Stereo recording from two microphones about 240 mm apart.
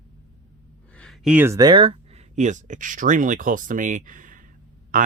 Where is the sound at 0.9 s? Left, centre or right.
Centre.